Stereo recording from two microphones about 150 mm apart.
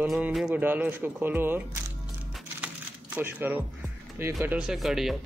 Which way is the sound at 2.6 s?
15° right (ahead or behind).